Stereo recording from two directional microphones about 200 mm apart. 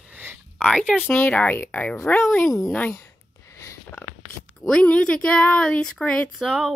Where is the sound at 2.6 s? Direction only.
5° left (ahead or behind).